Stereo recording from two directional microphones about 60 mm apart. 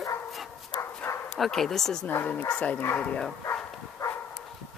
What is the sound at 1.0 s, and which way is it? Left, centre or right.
Bow-wow, left.